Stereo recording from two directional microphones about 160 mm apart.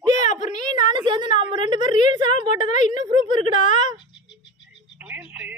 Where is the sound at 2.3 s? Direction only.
50° left (ahead or behind).